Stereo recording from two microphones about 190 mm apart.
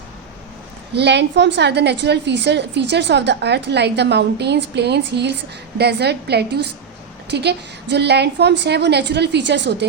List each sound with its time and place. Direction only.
0.9 s a woman's voice: 65° right (ahead or behind)